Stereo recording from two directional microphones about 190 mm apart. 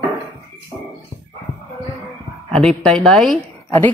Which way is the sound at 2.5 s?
5° left (ahead or behind).